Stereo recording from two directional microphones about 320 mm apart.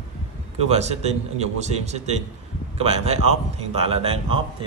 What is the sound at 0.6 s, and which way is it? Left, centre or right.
A man's voice, centre.